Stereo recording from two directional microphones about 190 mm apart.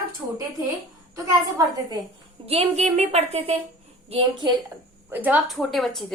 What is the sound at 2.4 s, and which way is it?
A woman's voice, 35° right (ahead or behind).